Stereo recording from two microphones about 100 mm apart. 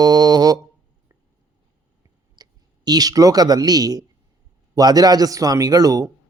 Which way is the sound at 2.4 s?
45° right (ahead or behind).